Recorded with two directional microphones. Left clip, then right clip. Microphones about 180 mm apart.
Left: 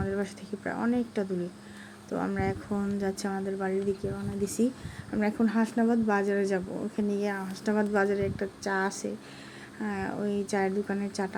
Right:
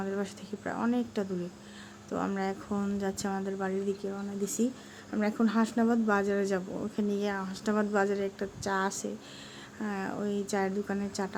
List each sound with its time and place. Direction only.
0.0 s speech: 10° left (ahead or behind)